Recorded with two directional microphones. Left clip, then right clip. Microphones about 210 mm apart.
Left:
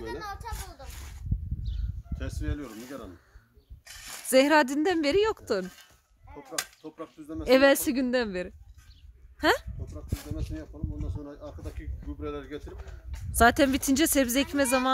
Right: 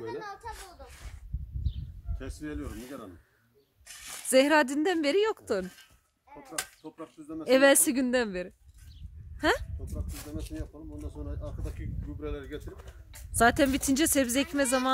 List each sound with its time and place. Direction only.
0.0 s children playing: 55° left (ahead or behind)
2.1 s speech: 20° left (ahead or behind); by 5.7 s 5° left (ahead or behind)
6.8 s speech: 25° left (ahead or behind)
7.6 s speech: centre (ahead or behind)
9.4 s speech: 10° left (ahead or behind)
10.0 s speech: 10° right (ahead or behind)
12.7 s a sound: 40° right (ahead or behind)
13.3 s speech: 5° left (ahead or behind)